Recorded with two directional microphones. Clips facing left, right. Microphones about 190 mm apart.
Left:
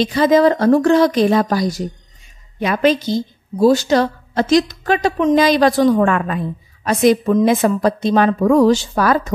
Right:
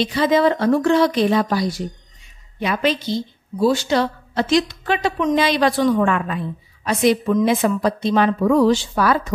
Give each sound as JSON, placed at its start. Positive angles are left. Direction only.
{"t": 0.0, "sound": "a woman's voice", "side_deg": 45}